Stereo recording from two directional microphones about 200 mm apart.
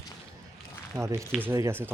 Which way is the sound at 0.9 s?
15° right (ahead or behind).